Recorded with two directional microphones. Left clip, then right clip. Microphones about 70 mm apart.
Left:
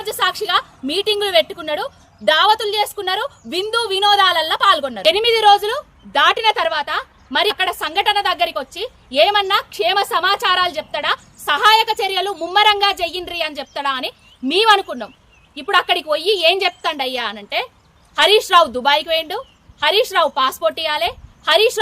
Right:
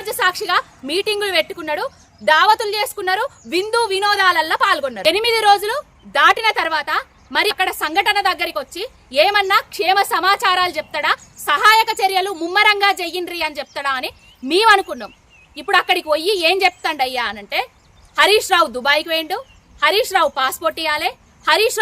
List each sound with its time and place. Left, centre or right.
0.0 s a woman's voice: right